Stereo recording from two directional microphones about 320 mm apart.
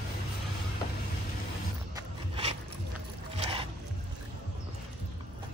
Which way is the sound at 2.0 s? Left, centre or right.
Centre.